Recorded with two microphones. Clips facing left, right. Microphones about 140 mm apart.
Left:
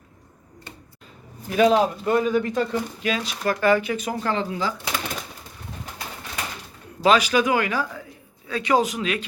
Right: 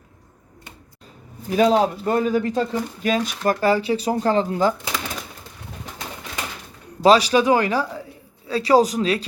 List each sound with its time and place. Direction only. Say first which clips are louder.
1.5 s speech: right 1 dB; 35° right (ahead or behind)
7.0 s speech: right 4 dB; 35° right (ahead or behind)